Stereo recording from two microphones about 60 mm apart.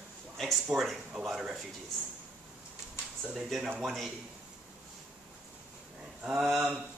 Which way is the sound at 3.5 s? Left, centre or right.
Centre.